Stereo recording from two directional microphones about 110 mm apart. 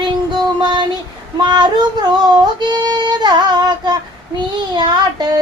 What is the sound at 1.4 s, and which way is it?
Female singing, 45° right (ahead or behind).